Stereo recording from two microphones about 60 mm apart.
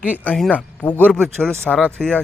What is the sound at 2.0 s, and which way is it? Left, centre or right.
Speech, centre.